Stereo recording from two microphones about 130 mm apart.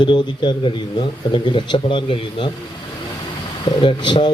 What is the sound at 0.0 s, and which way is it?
A man's voice, 35° left (ahead or behind).